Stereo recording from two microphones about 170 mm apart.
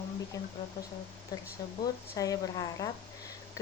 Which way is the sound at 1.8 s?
20° left (ahead or behind).